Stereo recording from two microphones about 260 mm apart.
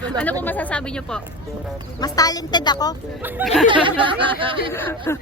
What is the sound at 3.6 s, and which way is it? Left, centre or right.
Speech, centre.